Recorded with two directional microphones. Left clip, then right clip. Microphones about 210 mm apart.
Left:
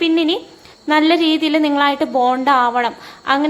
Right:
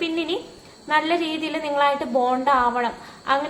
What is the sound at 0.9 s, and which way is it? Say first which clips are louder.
A woman's voice: left 7 dB; 40° left (ahead or behind).